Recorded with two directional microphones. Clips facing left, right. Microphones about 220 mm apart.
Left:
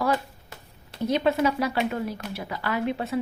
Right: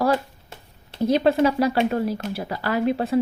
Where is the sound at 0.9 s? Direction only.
35° right (ahead or behind).